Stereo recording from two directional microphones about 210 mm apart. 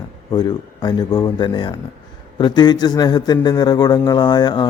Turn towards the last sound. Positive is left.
turn(degrees=20)  # may be behind; listen again after turning